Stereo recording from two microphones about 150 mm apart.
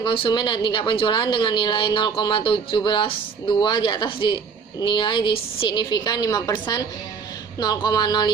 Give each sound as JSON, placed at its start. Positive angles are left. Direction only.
{"t": 0.0, "sound": "a woman's voice", "side_deg": 35}